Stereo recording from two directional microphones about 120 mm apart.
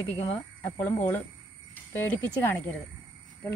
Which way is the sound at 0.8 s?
15° left (ahead or behind).